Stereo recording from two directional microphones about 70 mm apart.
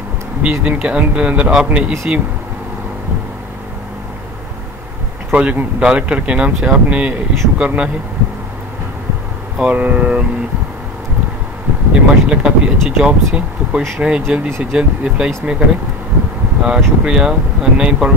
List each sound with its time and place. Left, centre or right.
0.4 s speech: centre
5.3 s speech: centre
9.6 s speech: right
11.9 s speech: centre
16.6 s speech: centre